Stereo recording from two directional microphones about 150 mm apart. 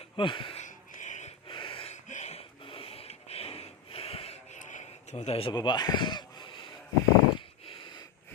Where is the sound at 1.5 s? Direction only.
35° left (ahead or behind).